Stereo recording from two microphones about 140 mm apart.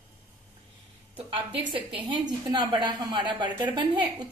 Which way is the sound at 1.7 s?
35° right (ahead or behind).